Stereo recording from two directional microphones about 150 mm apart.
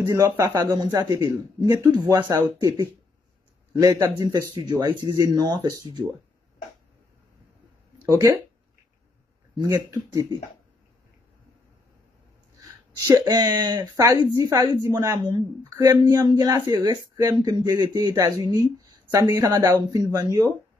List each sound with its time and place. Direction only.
0.0 s speech: 20° right (ahead or behind)
0.3 s speech: 30° right (ahead or behind); by 2.3 s 15° right (ahead or behind)
3.8 s speech: 25° right (ahead or behind)
8.0 s speech: 20° right (ahead or behind)
9.8 s speech: 20° right (ahead or behind)
12.5 s speech: 25° right (ahead or behind)